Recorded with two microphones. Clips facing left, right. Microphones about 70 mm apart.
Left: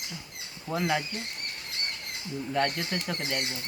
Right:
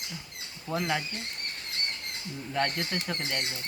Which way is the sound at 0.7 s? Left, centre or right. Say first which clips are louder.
Left 2 dB; centre.